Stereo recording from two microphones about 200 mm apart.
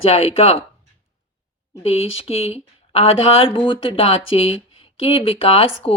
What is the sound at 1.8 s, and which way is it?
Speech, 30° left (ahead or behind).